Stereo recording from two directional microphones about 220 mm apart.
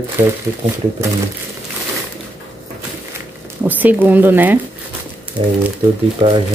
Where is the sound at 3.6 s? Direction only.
10° right (ahead or behind).